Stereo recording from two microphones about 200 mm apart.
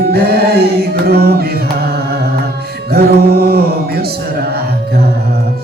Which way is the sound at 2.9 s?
50° right (ahead or behind).